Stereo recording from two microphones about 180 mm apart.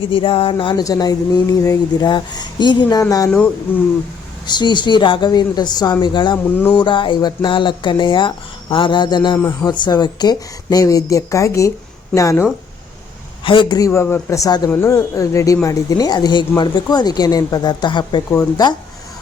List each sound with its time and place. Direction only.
0.1 s speech: 30° left (ahead or behind)
4.4 s speech: 25° left (ahead or behind)
9.4 s a man's voice: 15° left (ahead or behind)
9.7 s a man's voice: 25° left (ahead or behind)